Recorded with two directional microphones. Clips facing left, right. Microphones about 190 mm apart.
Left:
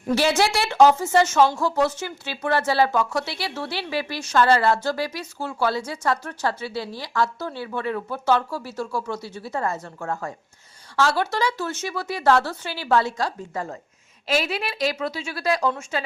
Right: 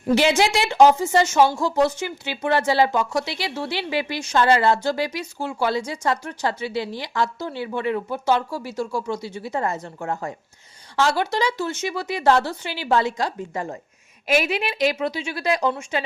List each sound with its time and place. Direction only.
0.1 s a woman's voice: 20° right (ahead or behind)